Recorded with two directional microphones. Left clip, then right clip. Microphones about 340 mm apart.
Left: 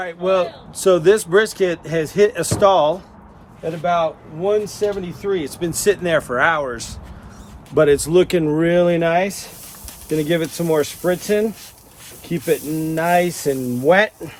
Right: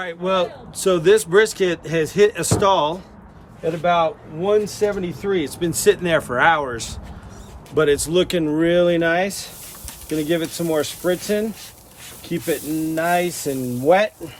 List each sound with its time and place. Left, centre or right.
0.0 s speech: centre
7.8 s speech: centre